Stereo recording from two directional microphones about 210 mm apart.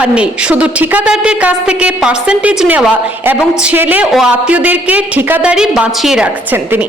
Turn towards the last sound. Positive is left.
turn(degrees=-10)  # may be behind; listen again after turning